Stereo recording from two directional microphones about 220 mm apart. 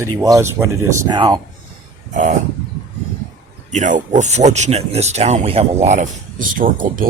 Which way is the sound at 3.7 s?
35° right (ahead or behind).